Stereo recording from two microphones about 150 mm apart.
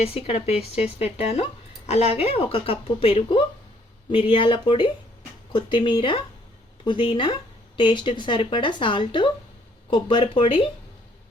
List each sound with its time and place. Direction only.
0.0 s a woman's voice: 40° left (ahead or behind)